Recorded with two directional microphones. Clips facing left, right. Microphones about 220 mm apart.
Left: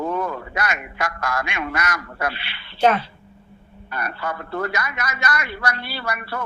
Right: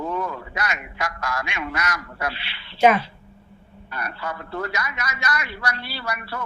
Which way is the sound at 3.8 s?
55° left (ahead or behind).